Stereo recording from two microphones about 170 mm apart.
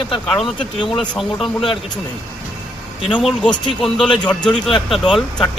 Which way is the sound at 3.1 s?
5° left (ahead or behind).